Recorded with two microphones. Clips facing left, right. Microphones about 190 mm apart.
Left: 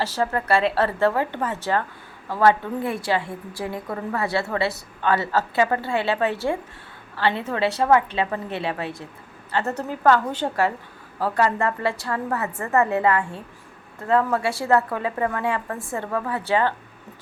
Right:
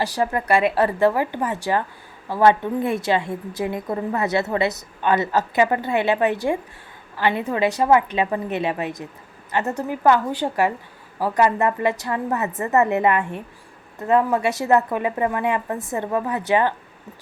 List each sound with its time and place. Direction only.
0.0 s a woman's voice: 15° right (ahead or behind)